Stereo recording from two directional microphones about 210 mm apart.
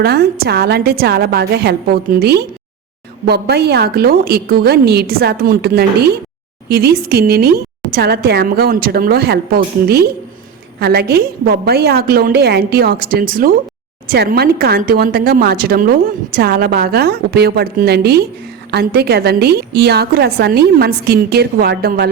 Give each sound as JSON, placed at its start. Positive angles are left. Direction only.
{"t": 0.0, "sound": "speech", "side_deg": -50}